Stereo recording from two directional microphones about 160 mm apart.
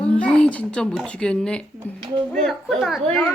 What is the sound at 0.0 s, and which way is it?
Speech, 5° left (ahead or behind).